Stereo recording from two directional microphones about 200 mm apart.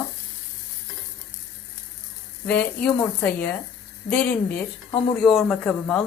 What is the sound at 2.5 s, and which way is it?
A woman's voice, 10° left (ahead or behind).